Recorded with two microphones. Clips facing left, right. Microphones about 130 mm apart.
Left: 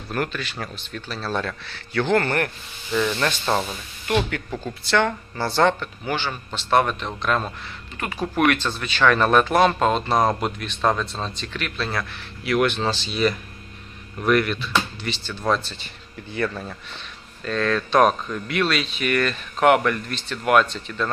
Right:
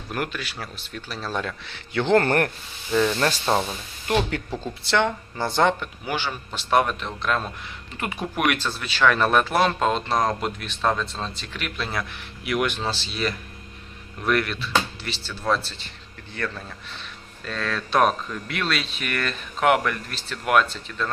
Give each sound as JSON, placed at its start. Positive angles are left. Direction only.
{"t": 0.1, "sound": "speech", "side_deg": -10}
{"t": 2.1, "sound": "speech", "side_deg": -40}
{"t": 2.9, "sound": "speech", "side_deg": -30}
{"t": 7.9, "sound": "speech", "side_deg": -20}
{"t": 8.2, "sound": "speech", "side_deg": -10}
{"t": 16.3, "sound": "a man's voice", "side_deg": 10}
{"t": 17.4, "sound": "speech", "side_deg": 0}